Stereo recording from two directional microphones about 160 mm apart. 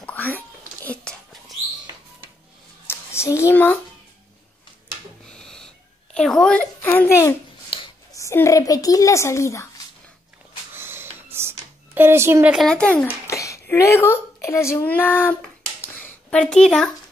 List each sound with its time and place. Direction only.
0.0 s whispering: 10° left (ahead or behind)
2.9 s a child's voice: 15° left (ahead or behind)
5.2 s owl: 5° left (ahead or behind)
6.1 s a woman's voice: 5° left (ahead or behind)
7.7 s a sound: 35° left (ahead or behind)
8.1 s a child's voice: 20° left (ahead or behind)
10.7 s a sound: 15° right (ahead or behind)
12.5 s a child's voice: 5° left (ahead or behind)
15.8 s a sound: 10° left (ahead or behind)
16.6 s speech: 5° left (ahead or behind)